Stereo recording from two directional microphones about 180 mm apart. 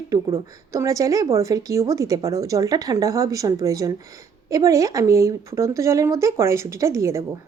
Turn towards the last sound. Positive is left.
turn(degrees=-15)  # may be behind; listen again after turning